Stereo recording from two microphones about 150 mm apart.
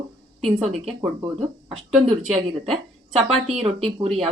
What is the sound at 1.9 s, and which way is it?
Speech, 45° right (ahead or behind).